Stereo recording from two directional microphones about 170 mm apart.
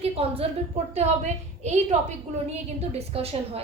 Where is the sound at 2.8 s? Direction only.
35° right (ahead or behind).